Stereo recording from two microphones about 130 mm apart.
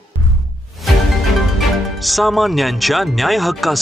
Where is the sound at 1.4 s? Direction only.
Centre (ahead or behind).